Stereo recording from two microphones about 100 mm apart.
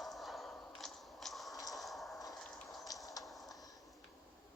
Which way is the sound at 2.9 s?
40° left (ahead or behind).